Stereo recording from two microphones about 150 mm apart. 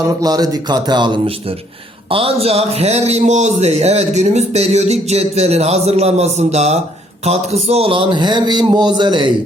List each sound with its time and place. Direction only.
0.0 s a man's voice: 25° right (ahead or behind)